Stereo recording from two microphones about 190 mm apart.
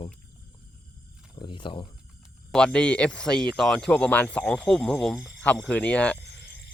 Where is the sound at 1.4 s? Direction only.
25° left (ahead or behind).